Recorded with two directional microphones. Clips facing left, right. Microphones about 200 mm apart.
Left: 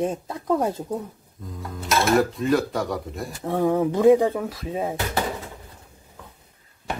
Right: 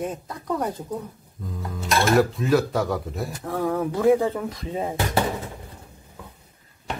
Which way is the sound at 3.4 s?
20° left (ahead or behind).